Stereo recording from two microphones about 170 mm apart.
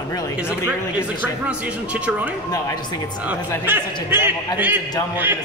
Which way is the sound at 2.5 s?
20° left (ahead or behind).